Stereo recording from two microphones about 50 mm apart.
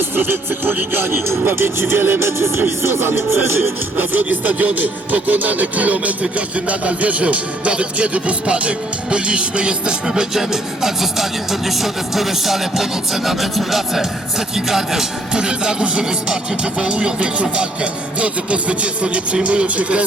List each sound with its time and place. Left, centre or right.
0.2 s speech: right
1.3 s speech: right
3.9 s speech: right; by 10.2 s centre
10.3 s speech: centre; by 20.1 s right